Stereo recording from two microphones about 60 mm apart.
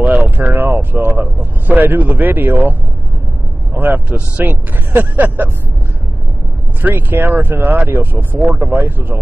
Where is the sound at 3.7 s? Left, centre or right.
Right.